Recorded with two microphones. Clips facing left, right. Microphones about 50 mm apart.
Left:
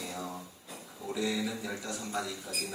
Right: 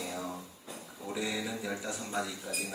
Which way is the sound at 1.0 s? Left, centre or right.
Centre.